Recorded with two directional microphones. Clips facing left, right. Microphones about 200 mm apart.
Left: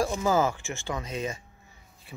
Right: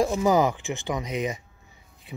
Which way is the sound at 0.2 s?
15° right (ahead or behind).